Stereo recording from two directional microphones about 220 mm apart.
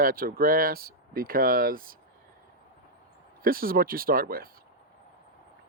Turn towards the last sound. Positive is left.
turn(degrees=-40)  # may be behind; listen again after turning